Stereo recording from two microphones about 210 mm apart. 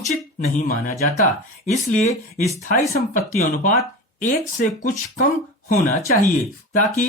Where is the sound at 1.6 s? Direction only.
35° left (ahead or behind).